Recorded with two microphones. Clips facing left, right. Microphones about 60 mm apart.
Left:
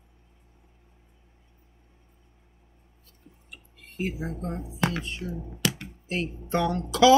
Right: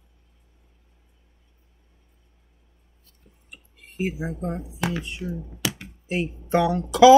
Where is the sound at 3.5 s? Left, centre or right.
Centre.